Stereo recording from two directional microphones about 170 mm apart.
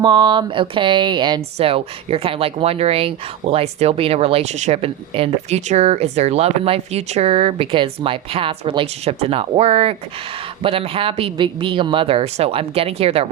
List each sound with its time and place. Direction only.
0.0 s speech: 25° right (ahead or behind)